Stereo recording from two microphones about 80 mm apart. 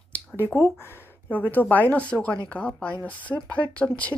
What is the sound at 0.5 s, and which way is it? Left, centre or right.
Speech, left.